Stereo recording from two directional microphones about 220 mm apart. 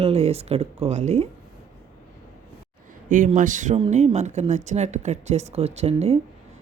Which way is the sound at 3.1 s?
35° right (ahead or behind).